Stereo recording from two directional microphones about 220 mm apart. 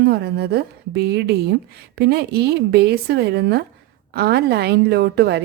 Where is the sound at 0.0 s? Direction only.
45° right (ahead or behind).